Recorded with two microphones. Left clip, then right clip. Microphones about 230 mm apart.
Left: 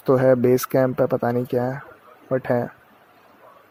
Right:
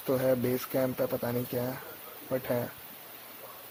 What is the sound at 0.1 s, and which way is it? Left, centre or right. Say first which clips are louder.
Speech: left 12 dB; left.